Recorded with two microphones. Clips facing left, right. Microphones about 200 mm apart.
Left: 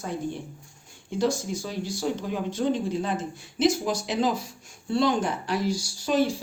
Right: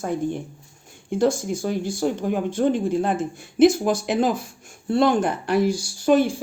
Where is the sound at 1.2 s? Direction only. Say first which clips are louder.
Right 5 dB; 50° right (ahead or behind).